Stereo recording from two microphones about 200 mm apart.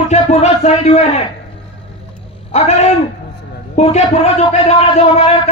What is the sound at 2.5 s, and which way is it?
A man's voice, 35° left (ahead or behind).